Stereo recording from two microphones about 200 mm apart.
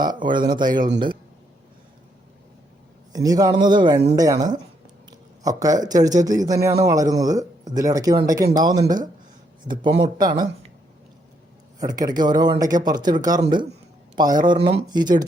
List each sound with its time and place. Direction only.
0.0 s speech: 20° right (ahead or behind)
3.1 s a man's voice: 20° right (ahead or behind)
10.0 s speech: 20° right (ahead or behind)
11.8 s speech: 20° right (ahead or behind)